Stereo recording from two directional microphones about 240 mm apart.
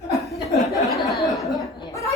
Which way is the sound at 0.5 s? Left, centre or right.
Centre.